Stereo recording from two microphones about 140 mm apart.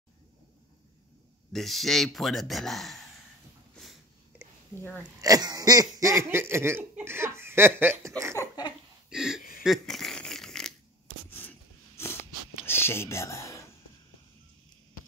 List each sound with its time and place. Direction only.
1.5 s speech: centre (ahead or behind)
4.7 s speech: 15° left (ahead or behind)
5.2 s laughter: 25° right (ahead or behind)
8.4 s a sound: 30° left (ahead or behind)
9.1 s throat clearing: 5° right (ahead or behind)
9.6 s fart: centre (ahead or behind)
11.2 s a sound: 15° left (ahead or behind)
12.6 s speech: 15° left (ahead or behind)